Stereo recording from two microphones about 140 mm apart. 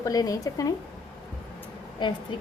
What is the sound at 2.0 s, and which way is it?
Speech, 35° left (ahead or behind).